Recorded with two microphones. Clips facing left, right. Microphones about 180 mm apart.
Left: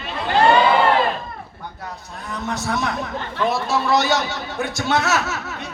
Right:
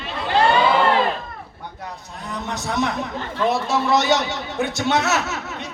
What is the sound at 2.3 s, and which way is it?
A man's voice, 20° right (ahead or behind).